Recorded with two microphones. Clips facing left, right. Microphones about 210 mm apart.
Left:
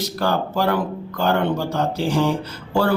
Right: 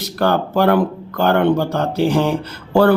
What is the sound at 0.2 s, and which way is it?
A man's voice, 60° right (ahead or behind).